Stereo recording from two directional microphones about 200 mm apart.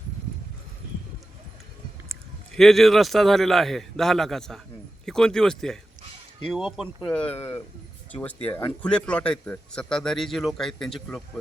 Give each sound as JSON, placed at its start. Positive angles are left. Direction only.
{"t": 2.6, "sound": "a man's voice", "side_deg": 0}